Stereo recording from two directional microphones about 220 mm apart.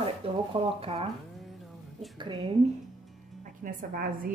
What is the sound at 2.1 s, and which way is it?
Speech, 25° right (ahead or behind).